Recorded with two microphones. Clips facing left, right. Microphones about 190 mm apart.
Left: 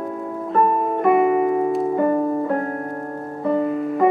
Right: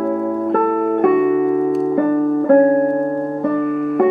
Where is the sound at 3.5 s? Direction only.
65° right (ahead or behind).